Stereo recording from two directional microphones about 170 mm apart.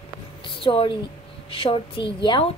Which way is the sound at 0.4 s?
30° left (ahead or behind).